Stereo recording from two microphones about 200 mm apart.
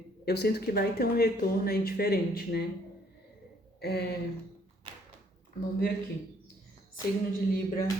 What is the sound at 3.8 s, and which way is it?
Speech, 55° left (ahead or behind).